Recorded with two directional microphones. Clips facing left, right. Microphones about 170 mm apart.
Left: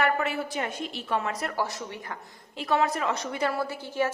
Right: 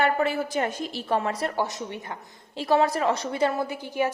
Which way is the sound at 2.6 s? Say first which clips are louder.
Right 4 dB; 30° right (ahead or behind).